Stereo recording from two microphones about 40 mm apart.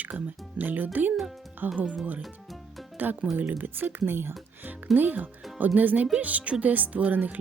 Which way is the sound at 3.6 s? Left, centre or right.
Right.